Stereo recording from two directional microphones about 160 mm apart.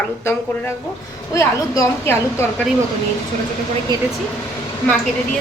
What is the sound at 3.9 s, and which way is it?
Speech, 25° right (ahead or behind).